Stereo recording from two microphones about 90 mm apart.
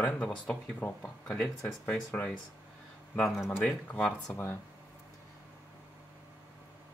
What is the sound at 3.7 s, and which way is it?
Speech, 15° left (ahead or behind).